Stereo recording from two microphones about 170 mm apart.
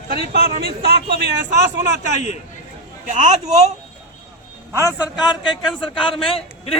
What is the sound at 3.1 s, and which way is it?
Speech, 45° right (ahead or behind).